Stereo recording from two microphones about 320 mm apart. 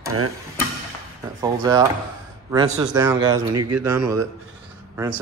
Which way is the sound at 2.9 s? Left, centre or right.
Centre.